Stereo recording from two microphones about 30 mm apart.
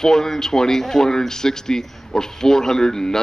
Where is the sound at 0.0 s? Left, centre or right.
Centre.